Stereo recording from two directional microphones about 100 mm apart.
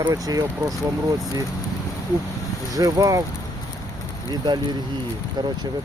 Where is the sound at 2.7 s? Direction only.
35° right (ahead or behind).